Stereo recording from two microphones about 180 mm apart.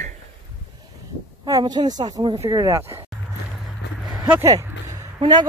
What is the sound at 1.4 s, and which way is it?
Speech, 20° right (ahead or behind).